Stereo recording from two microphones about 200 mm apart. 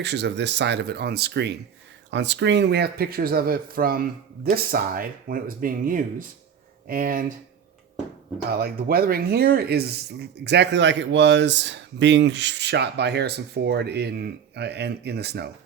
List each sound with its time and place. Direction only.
0.0 s speech: 60° right (ahead or behind); by 7.3 s 45° right (ahead or behind)
8.4 s speech: 50° right (ahead or behind)